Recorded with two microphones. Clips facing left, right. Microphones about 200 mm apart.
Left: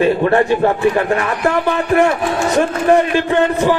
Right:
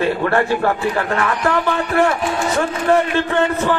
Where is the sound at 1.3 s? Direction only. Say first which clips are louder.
Left 2 dB; 30° left (ahead or behind).